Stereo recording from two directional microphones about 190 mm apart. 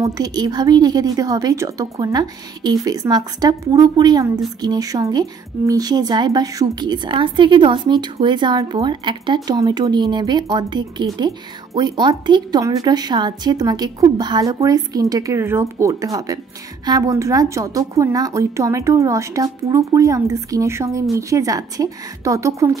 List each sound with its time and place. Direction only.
0.0 s a woman's voice: 20° right (ahead or behind)